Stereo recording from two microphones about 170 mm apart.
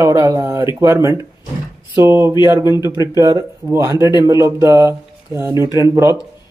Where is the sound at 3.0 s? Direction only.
20° right (ahead or behind).